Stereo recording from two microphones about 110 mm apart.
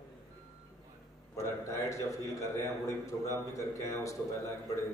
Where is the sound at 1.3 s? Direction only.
30° left (ahead or behind).